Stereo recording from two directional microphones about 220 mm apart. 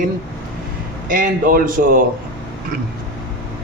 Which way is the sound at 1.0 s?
40° right (ahead or behind).